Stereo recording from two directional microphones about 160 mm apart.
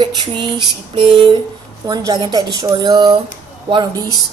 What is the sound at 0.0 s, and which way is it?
Female singing, 25° right (ahead or behind).